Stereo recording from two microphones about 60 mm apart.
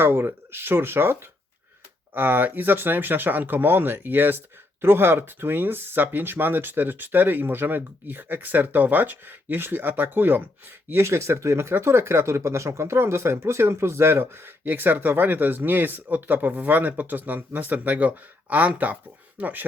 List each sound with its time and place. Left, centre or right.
0.0 s speech: right
10.9 s speech: right